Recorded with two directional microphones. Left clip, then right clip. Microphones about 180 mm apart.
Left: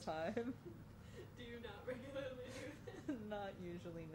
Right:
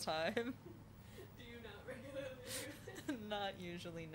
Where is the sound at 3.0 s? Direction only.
15° right (ahead or behind).